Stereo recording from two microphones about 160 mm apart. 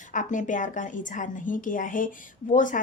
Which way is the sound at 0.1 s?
55° left (ahead or behind).